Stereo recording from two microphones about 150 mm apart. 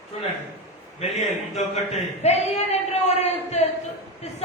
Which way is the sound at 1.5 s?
45° left (ahead or behind).